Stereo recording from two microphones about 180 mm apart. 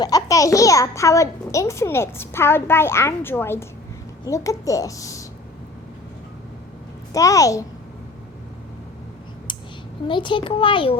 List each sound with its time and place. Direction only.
0.0 s a child's voice: 20° left (ahead or behind)
7.1 s a child's voice: 20° left (ahead or behind)
10.1 s a child's voice: 25° left (ahead or behind)